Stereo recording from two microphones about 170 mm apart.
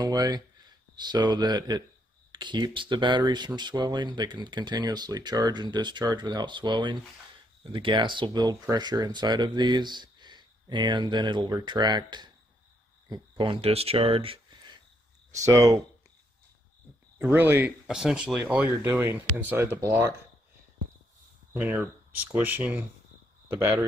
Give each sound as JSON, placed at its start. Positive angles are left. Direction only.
{"t": 0.0, "sound": "speech", "side_deg": -25}
{"t": 15.3, "sound": "speech", "side_deg": -20}
{"t": 17.2, "sound": "speech", "side_deg": -10}
{"t": 21.5, "sound": "speech", "side_deg": -10}